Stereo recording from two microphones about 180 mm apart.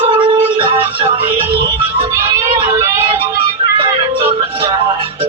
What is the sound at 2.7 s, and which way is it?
Vehicle, 25° right (ahead or behind).